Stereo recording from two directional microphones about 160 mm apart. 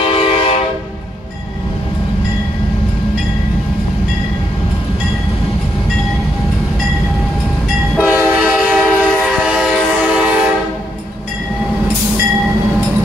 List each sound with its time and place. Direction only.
0.0 s train: 35° left (ahead or behind)
8.0 s train: 10° right (ahead or behind)